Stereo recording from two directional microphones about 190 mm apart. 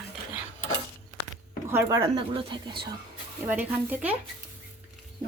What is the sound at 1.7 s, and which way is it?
Stir, 15° right (ahead or behind).